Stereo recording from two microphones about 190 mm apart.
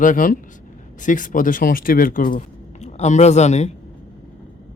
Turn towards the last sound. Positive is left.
turn(degrees=35)  # may be behind; listen again after turning